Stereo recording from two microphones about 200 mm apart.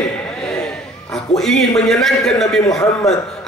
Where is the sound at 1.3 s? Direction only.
Centre (ahead or behind).